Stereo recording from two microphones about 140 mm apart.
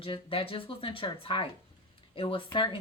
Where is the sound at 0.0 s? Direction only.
40° left (ahead or behind).